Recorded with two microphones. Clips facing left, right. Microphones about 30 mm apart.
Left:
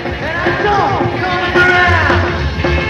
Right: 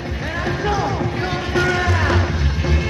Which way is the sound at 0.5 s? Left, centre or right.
Left.